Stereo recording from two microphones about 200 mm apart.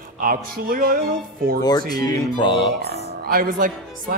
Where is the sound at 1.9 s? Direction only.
20° left (ahead or behind).